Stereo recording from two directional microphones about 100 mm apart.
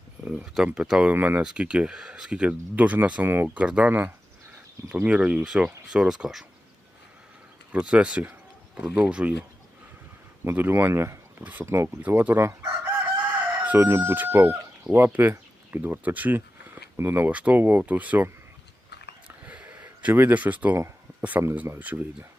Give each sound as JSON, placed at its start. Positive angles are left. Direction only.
{"t": 0.3, "sound": "speech", "side_deg": -10}
{"t": 7.7, "sound": "speech", "side_deg": -10}
{"t": 10.4, "sound": "speech", "side_deg": -20}
{"t": 19.5, "sound": "a sound", "side_deg": -15}
{"t": 21.2, "sound": "speech", "side_deg": -15}